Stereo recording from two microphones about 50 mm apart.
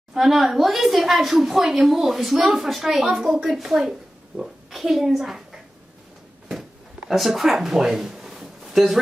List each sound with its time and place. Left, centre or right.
0.1 s speech: centre
4.6 s a woman's voice: centre
7.1 s speech: centre